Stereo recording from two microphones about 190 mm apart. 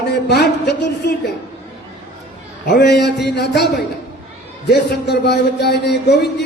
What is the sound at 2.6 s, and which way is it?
Speech, 60° left (ahead or behind).